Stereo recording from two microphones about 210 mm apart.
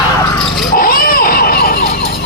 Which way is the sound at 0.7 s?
45° left (ahead or behind).